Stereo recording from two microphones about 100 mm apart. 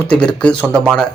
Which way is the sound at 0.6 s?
25° right (ahead or behind).